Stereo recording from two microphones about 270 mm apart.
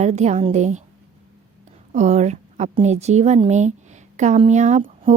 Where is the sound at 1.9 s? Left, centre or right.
Right.